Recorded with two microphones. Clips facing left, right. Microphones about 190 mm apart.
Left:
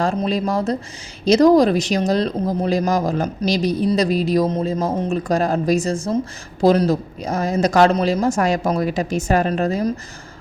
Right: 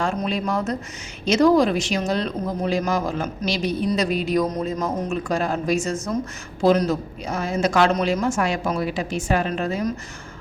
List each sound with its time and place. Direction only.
0.0 s speech: 35° left (ahead or behind)